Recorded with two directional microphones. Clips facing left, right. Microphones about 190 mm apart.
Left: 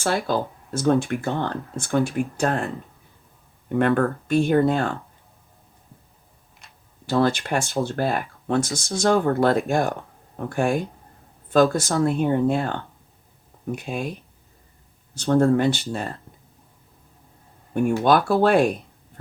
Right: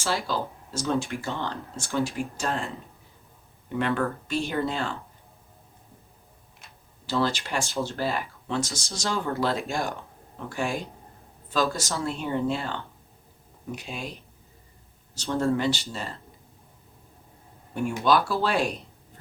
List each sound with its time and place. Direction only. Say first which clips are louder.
0.0 s speech: left 5 dB; 55° left (ahead or behind)
3.7 s speech: left 6 dB; 50° left (ahead or behind)
7.1 s speech: left 6 dB; 55° left (ahead or behind)
15.1 s speech: left 7 dB; 55° left (ahead or behind)
17.7 s speech: left 5 dB; 55° left (ahead or behind)